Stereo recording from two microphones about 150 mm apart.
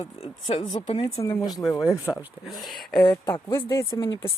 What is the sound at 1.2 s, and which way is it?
Speech, 20° left (ahead or behind).